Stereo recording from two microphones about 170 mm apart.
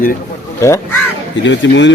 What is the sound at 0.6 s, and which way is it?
Speech, 15° left (ahead or behind).